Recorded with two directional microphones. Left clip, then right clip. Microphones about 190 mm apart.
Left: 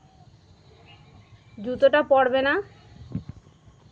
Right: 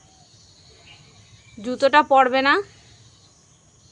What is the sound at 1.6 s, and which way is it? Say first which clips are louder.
A woman's voice: right 2 dB; 25° right (ahead or behind).